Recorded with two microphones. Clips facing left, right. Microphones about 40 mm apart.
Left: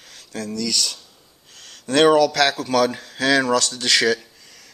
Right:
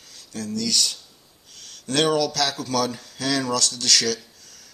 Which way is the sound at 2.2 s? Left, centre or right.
Left.